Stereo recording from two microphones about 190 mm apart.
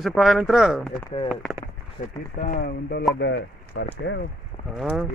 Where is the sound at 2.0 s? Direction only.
50° left (ahead or behind).